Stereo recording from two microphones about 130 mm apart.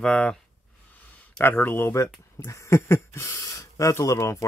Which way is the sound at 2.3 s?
20° left (ahead or behind).